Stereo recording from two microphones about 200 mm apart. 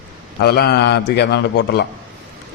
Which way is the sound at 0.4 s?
55° left (ahead or behind).